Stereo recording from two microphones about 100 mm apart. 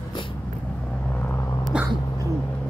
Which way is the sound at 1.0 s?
15° left (ahead or behind).